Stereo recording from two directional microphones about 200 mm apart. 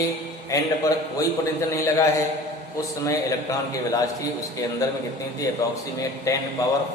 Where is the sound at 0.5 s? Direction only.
15° left (ahead or behind).